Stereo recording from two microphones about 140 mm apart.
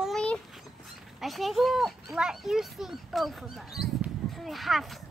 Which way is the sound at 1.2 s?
Centre (ahead or behind).